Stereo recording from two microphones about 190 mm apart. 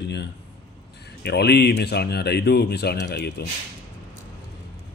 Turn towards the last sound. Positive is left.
turn(degrees=60)  # may be behind; listen again after turning